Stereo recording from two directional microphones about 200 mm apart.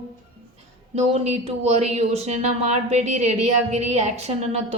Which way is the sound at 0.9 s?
35° right (ahead or behind).